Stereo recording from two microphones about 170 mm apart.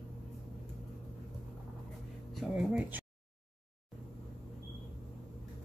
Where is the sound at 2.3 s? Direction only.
5° right (ahead or behind).